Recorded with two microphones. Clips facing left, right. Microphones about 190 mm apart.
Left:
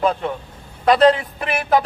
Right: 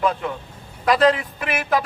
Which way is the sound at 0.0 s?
30° left (ahead or behind).